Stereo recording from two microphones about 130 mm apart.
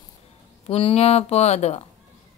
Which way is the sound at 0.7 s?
50° left (ahead or behind).